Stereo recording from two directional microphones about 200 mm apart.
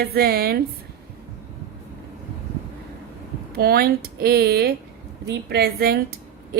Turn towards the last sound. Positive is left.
turn(degrees=-50)  # may be behind; listen again after turning